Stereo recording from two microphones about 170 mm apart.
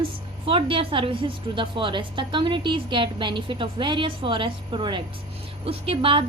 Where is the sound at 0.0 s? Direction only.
30° right (ahead or behind).